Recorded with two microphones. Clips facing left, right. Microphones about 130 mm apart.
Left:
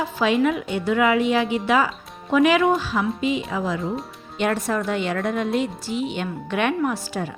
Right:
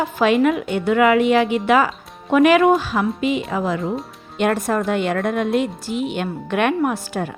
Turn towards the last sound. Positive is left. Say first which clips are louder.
# right 3 dB
turn(degrees=-55)  # may be behind; listen again after turning